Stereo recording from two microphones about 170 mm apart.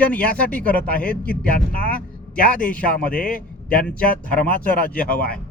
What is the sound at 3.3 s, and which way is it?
Speech, 55° left (ahead or behind).